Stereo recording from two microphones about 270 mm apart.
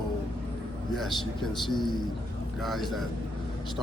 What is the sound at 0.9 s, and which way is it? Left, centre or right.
A man's voice, centre.